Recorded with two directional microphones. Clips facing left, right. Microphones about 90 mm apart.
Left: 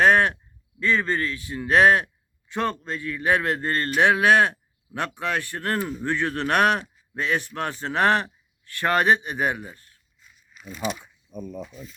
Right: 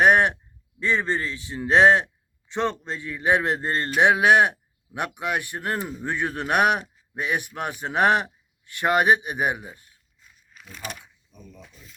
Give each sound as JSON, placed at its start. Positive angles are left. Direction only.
{"t": 0.0, "sound": "a man's voice", "side_deg": -20}
{"t": 11.0, "sound": "speech", "side_deg": 55}